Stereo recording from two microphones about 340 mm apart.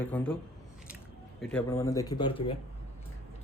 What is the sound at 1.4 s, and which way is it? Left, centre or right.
A man's voice, centre.